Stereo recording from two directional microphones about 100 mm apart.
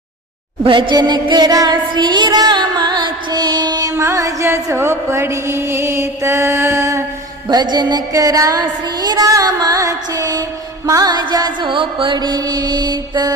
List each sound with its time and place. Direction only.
0.6 s music: 55° right (ahead or behind); by 7.0 s 30° right (ahead or behind)
7.4 s music: 45° right (ahead or behind)